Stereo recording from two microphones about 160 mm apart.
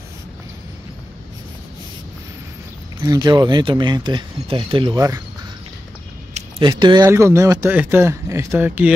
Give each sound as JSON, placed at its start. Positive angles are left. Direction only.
{"t": 3.0, "sound": "speech", "side_deg": -25}
{"t": 6.6, "sound": "speech", "side_deg": -30}